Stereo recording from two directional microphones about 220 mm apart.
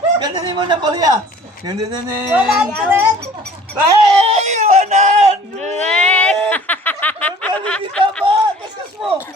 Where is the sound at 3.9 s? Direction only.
25° right (ahead or behind).